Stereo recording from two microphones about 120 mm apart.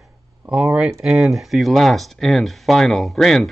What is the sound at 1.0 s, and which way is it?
Speech, 5° right (ahead or behind).